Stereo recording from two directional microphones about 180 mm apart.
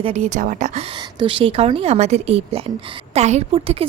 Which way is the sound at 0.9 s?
30° right (ahead or behind).